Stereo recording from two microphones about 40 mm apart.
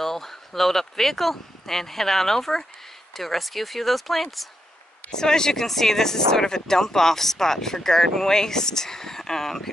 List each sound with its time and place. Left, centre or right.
0.0 s speech: centre
5.1 s speech: centre